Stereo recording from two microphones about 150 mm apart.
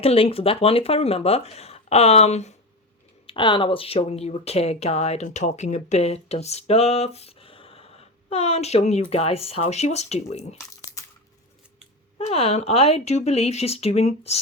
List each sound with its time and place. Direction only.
0.0 s speech: 40° left (ahead or behind)
3.2 s speech: 35° left (ahead or behind)
12.1 s speech: 40° left (ahead or behind)